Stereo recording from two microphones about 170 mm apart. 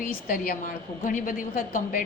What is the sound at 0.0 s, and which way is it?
A woman's voice, 55° left (ahead or behind).